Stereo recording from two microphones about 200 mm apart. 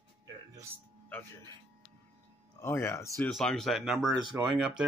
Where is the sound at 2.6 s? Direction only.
15° left (ahead or behind).